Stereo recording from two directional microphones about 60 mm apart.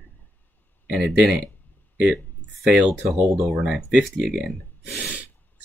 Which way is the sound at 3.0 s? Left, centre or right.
Centre.